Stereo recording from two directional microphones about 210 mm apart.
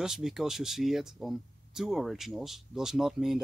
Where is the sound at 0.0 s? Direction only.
Centre (ahead or behind).